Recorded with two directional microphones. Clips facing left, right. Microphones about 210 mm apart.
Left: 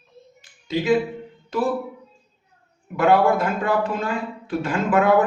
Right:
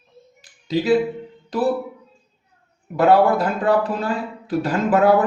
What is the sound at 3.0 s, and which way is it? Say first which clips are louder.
A man's voice: right 2 dB; 35° right (ahead or behind).